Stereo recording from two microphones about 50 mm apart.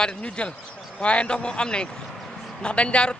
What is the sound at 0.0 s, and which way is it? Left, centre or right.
Speech, left.